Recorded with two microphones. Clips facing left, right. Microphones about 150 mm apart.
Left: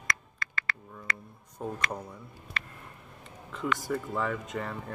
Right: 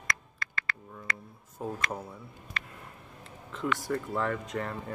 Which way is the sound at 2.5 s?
85° left.